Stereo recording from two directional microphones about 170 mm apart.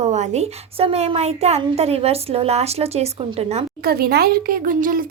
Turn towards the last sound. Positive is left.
turn(degrees=-55)  # may be behind; listen again after turning